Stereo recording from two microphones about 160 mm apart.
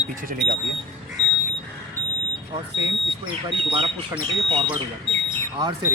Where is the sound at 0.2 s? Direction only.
60° right (ahead or behind).